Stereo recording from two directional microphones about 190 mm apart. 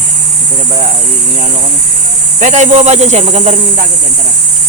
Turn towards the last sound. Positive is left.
turn(degrees=-35)  # may be behind; listen again after turning